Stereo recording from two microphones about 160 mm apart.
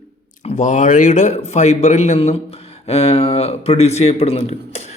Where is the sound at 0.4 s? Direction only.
45° left (ahead or behind).